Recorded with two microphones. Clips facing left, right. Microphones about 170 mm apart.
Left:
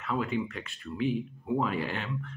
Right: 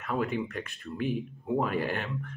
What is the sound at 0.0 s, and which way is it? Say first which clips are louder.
Speech: even; 50° right (ahead or behind).